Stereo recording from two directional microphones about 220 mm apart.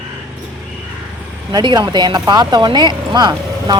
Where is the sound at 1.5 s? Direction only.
20° right (ahead or behind).